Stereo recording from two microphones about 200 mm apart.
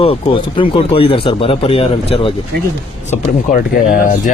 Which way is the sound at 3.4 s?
40° left (ahead or behind).